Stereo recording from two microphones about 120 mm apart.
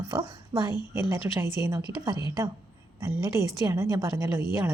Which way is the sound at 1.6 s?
30° right (ahead or behind).